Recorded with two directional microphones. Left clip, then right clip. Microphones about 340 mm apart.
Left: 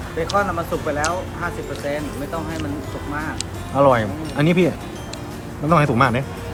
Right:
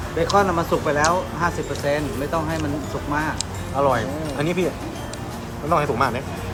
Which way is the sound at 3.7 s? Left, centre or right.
Left.